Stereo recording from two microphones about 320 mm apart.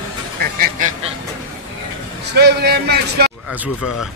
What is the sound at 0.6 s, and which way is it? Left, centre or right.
Duck, right.